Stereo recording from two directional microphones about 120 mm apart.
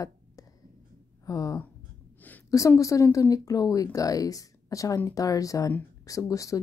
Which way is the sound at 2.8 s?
25° left (ahead or behind).